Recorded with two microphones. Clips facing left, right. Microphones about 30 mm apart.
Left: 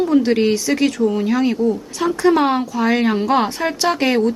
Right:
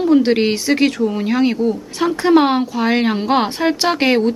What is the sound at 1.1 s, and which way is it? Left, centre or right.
Speech, centre.